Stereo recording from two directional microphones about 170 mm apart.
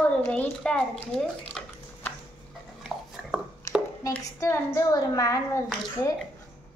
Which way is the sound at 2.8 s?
5° right (ahead or behind).